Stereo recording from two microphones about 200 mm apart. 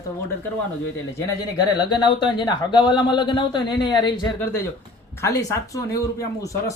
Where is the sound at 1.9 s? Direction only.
20° left (ahead or behind).